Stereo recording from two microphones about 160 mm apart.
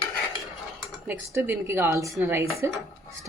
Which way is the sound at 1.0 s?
10° right (ahead or behind).